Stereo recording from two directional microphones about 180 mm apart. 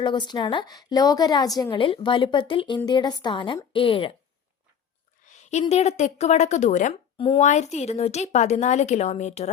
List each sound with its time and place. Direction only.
0.0 s a woman's voice: 25° left (ahead or behind)
5.2 s a woman's voice: 40° left (ahead or behind)
7.2 s a woman's voice: 30° left (ahead or behind)
7.4 s a woman's voice: 40° left (ahead or behind)